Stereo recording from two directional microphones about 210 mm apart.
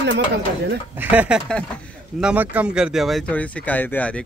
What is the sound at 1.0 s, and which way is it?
Speech, 5° right (ahead or behind).